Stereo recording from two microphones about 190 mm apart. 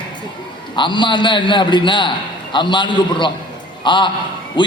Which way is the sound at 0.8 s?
25° left (ahead or behind).